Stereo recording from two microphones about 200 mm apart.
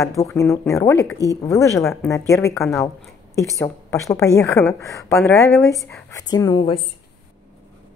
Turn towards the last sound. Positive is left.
turn(degrees=20)  # may be behind; listen again after turning